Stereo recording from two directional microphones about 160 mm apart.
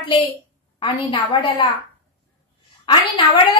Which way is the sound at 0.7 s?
30° left (ahead or behind).